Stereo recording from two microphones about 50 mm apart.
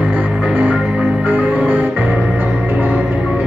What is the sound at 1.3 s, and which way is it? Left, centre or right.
Music, right.